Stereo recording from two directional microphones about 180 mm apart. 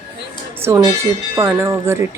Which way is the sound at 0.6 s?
15° right (ahead or behind).